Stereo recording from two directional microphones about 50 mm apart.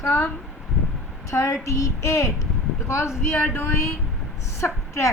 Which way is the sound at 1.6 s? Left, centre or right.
Left.